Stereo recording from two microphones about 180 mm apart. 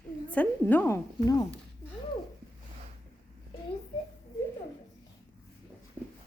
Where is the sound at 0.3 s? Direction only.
10° left (ahead or behind).